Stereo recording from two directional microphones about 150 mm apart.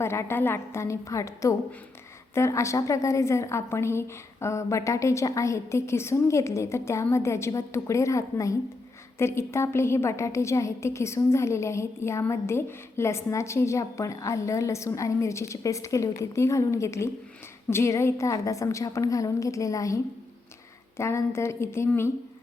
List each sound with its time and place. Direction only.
0.0 s a woman's voice: 15° left (ahead or behind)
21.0 s speech: 20° left (ahead or behind)